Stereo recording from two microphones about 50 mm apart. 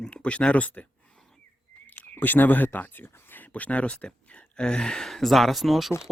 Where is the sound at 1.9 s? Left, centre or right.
Left; by 5.1 s centre.